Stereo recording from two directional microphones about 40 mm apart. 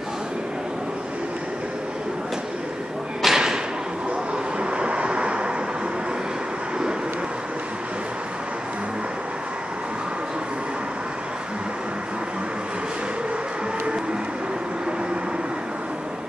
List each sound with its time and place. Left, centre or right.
3.2 s thump: centre
4.6 s vehicle: right